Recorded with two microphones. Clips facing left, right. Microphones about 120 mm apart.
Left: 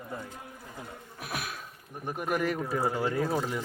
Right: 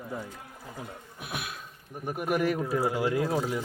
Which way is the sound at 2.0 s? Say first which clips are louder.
Right 2 dB; 5° right (ahead or behind).